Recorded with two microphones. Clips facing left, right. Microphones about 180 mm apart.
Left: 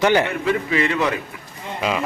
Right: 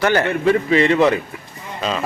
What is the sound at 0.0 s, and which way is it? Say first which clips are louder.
Speech: even; 15° left (ahead or behind).